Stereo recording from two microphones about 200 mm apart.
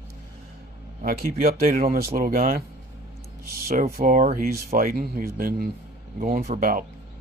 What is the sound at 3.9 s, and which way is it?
Speech, 40° right (ahead or behind).